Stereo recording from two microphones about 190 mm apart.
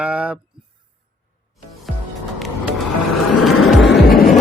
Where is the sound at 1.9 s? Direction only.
Centre (ahead or behind).